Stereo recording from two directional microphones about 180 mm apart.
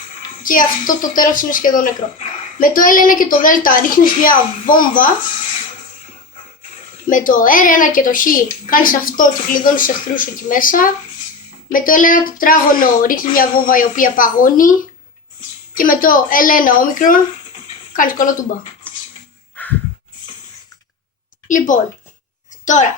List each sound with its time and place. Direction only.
0.4 s speech: 50° left (ahead or behind)
7.1 s speech: 45° left (ahead or behind)
15.7 s speech: 50° left (ahead or behind)
18.8 s a sound: 5° left (ahead or behind)
21.4 s a woman's voice: 45° left (ahead or behind)